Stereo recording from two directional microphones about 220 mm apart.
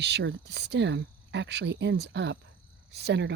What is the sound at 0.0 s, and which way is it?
Speech, 50° right (ahead or behind).